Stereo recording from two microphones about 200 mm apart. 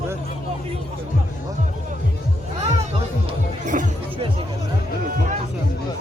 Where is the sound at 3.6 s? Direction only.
40° right (ahead or behind).